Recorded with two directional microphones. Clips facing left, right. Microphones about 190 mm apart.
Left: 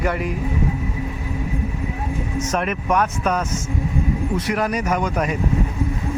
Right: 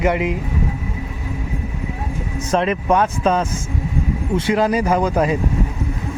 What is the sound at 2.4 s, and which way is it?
Speech, 30° right (ahead or behind).